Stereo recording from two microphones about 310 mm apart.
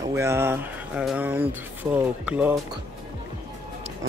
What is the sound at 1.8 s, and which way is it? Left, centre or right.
Speech, centre.